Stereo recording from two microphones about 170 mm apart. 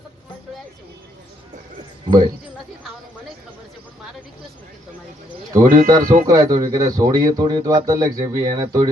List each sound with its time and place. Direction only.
2.0 s speech: 25° right (ahead or behind)
5.5 s speech: 50° right (ahead or behind)
6.2 s speech: 20° right (ahead or behind)